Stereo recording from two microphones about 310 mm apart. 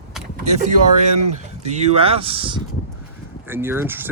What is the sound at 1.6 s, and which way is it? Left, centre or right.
Speech, right.